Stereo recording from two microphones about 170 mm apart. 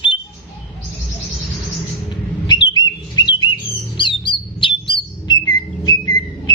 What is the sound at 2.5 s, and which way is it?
Bird, 25° left (ahead or behind).